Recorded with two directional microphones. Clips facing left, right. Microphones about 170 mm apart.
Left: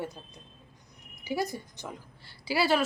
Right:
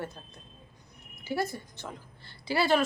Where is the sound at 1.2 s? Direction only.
15° left (ahead or behind).